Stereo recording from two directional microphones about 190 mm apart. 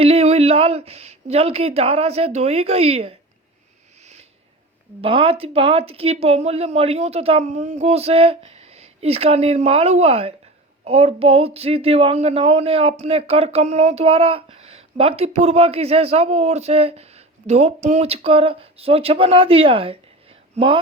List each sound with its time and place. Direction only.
0.0 s speech: 30° right (ahead or behind)
4.0 s a sound: 35° right (ahead or behind)
4.9 s speech: 30° right (ahead or behind)